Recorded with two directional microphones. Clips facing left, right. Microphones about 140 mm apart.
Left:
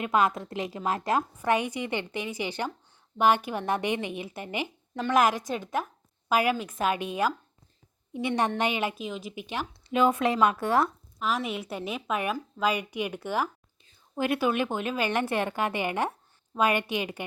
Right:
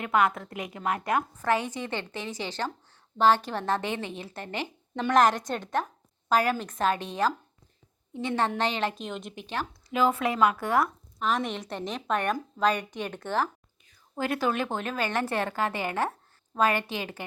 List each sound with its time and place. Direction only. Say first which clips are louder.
0.0 s a woman's voice: even; 20° left (ahead or behind)
11.2 s a woman's voice: right 1 dB; 5° left (ahead or behind)